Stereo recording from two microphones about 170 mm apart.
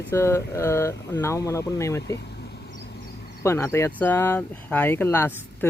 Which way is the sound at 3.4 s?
15° left (ahead or behind).